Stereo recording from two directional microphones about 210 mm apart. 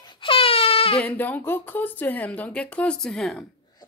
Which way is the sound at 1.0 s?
10° left (ahead or behind).